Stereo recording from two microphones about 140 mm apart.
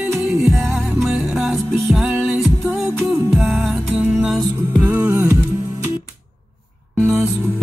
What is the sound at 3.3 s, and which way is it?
Music, centre (ahead or behind).